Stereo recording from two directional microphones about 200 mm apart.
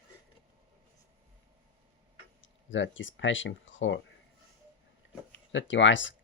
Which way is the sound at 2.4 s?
70° left (ahead or behind).